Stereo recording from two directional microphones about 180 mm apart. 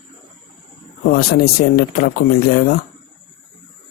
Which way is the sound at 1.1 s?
55° left (ahead or behind).